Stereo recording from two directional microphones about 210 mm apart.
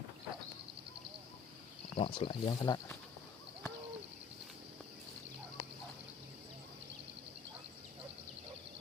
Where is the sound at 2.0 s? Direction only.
25° left (ahead or behind).